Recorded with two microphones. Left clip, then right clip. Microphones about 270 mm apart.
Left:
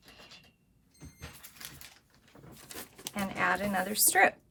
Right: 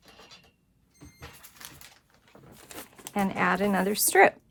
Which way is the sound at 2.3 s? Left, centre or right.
Right.